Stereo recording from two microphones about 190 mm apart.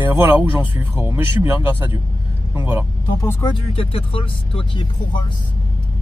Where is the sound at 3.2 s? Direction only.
15° left (ahead or behind).